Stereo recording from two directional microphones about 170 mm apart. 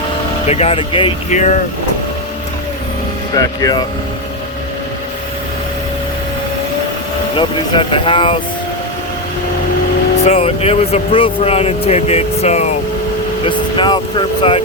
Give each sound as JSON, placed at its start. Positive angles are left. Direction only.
{"t": 0.4, "sound": "speech", "side_deg": 40}
{"t": 1.3, "sound": "speech", "side_deg": 45}
{"t": 3.3, "sound": "speech", "side_deg": 20}
{"t": 7.3, "sound": "speech", "side_deg": 30}
{"t": 10.2, "sound": "speech", "side_deg": 35}
{"t": 13.4, "sound": "speech", "side_deg": 30}